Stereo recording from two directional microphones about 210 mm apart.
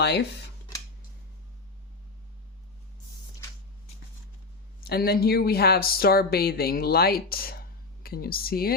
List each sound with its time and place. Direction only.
0.0 s speech: 55° left (ahead or behind)
4.8 s speech: 50° left (ahead or behind)